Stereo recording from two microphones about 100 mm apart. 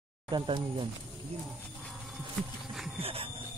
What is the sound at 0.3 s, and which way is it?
Speech, 60° right (ahead or behind).